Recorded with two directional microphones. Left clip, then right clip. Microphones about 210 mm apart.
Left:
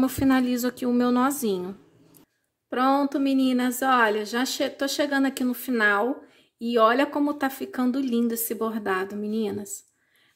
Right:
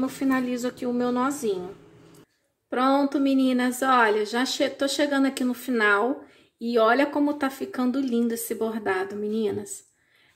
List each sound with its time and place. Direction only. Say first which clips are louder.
0.0 s a woman's voice: left 3 dB; 35° left (ahead or behind)
2.7 s speech: even; 20° left (ahead or behind)